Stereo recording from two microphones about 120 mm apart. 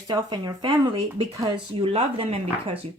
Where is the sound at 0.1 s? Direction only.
40° right (ahead or behind).